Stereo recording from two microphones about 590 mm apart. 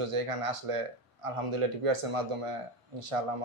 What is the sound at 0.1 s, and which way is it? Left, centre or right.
Speech, right.